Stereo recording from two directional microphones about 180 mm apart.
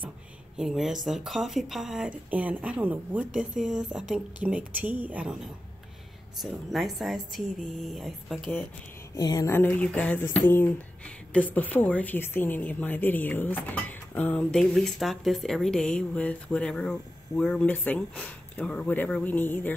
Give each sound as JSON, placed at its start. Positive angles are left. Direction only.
{"t": 0.6, "sound": "speech", "side_deg": 0}
{"t": 9.1, "sound": "a sound", "side_deg": 20}
{"t": 9.5, "sound": "a woman's voice", "side_deg": 10}